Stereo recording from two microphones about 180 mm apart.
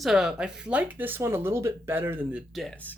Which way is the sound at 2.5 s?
Centre (ahead or behind).